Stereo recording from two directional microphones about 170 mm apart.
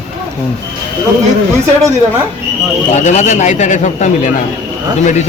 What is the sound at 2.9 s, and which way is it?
Speech, 45° left (ahead or behind).